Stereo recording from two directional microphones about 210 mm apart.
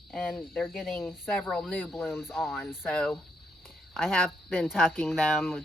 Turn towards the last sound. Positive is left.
turn(degrees=0)  # may be behind; listen again after turning